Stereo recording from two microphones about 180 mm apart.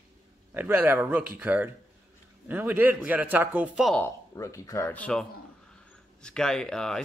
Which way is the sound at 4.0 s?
15° left (ahead or behind).